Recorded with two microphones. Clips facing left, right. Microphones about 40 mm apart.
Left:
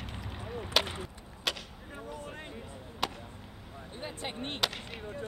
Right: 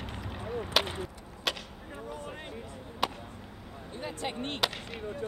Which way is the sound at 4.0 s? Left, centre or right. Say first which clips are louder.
Right 3 dB; left.